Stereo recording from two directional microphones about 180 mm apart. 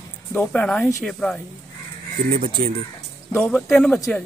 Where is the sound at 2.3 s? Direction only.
55° right (ahead or behind).